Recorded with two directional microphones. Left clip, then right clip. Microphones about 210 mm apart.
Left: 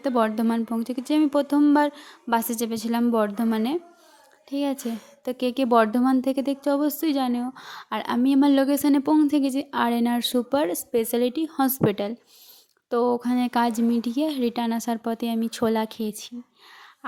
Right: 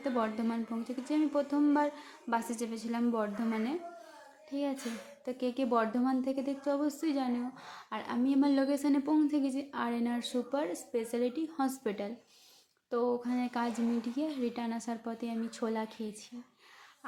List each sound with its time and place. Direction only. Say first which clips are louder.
0.0 s a woman's voice: left 10 dB; 45° left (ahead or behind)